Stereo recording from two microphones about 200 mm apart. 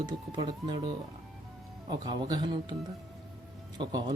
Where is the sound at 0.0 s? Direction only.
20° right (ahead or behind).